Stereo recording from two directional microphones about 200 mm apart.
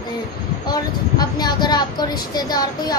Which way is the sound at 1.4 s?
20° left (ahead or behind).